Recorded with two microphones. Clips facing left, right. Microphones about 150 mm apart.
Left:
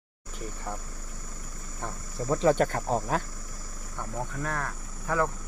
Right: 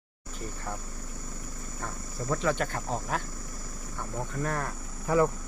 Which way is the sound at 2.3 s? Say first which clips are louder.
Left 6 dB; 30° left (ahead or behind).